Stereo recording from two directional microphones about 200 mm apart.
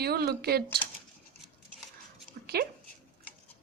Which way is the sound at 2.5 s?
50° right (ahead or behind).